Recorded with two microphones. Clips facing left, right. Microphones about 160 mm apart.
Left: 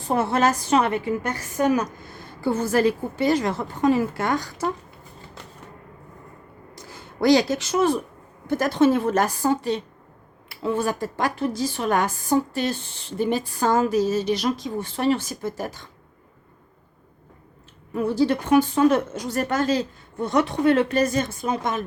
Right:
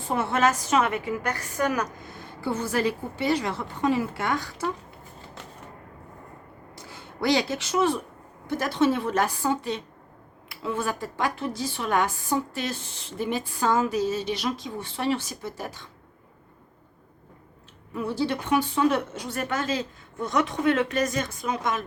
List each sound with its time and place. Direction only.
0.1 s a woman's voice: 40° left (ahead or behind); by 1.9 s 25° left (ahead or behind)
2.4 s a woman's voice: 45° left (ahead or behind)
6.7 s a woman's voice: 40° left (ahead or behind)
17.9 s a woman's voice: 45° left (ahead or behind)